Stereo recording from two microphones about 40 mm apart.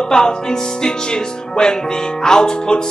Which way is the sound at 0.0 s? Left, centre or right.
Centre.